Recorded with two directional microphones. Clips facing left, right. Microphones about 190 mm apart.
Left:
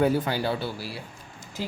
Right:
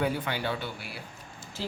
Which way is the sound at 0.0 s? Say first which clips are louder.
Left 6 dB; 40° left (ahead or behind).